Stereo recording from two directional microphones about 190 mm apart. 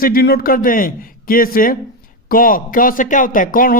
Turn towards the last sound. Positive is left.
turn(degrees=50)  # may be behind; listen again after turning